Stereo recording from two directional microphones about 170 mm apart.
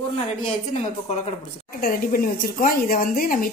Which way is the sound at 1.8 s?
55° left (ahead or behind).